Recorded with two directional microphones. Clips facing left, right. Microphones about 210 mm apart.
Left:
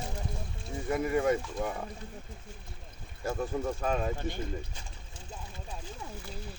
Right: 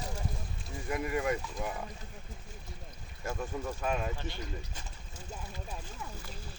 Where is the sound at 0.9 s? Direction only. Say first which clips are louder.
Left 5 dB; 30° left (ahead or behind).